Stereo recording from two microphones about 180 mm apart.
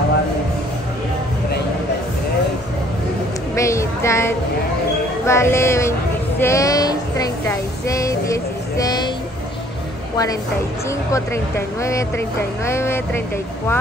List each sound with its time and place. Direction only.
3.5 s a sound: 15° left (ahead or behind)
5.2 s speech: 15° left (ahead or behind)
6.4 s child singing: 15° left (ahead or behind)
11.1 s speech: 15° left (ahead or behind)